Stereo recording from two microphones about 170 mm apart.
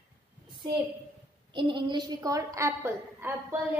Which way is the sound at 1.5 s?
30° right (ahead or behind).